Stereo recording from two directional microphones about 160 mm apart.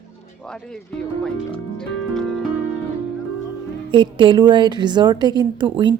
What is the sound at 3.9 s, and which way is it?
Speech, 30° right (ahead or behind).